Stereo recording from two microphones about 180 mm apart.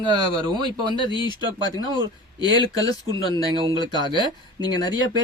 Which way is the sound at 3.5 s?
25° right (ahead or behind).